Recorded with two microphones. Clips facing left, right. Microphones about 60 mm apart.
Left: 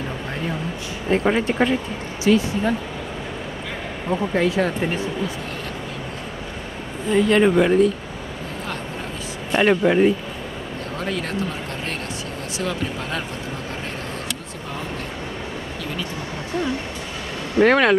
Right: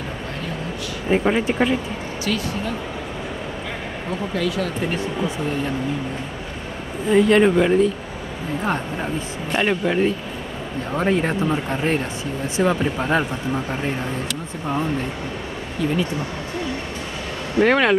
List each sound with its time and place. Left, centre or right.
1.0 s speech: centre
2.2 s speech: left
4.1 s speech: left
7.1 s speech: centre
9.5 s speech: centre
11.0 s speech: right
17.6 s speech: centre